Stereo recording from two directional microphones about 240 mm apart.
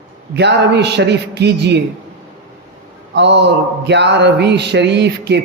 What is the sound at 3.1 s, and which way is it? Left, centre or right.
A man's voice, right.